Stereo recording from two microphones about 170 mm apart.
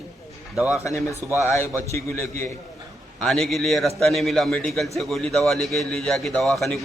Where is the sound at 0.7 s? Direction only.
20° left (ahead or behind).